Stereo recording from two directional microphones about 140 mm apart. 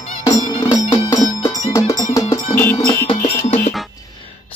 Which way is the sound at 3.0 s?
45° left (ahead or behind).